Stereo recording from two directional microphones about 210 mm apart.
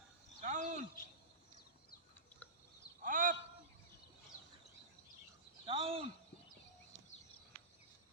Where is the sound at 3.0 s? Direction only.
40° right (ahead or behind).